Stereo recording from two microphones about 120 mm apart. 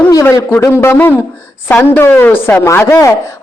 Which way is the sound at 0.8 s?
20° left (ahead or behind).